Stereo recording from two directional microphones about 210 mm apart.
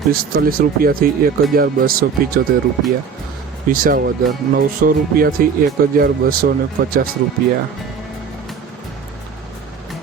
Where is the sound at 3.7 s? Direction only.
40° right (ahead or behind).